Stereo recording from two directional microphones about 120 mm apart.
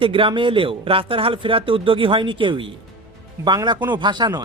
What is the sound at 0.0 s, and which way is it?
Speech, 45° right (ahead or behind).